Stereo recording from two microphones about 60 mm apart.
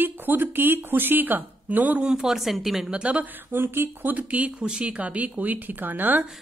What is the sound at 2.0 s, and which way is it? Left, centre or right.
Speech, centre.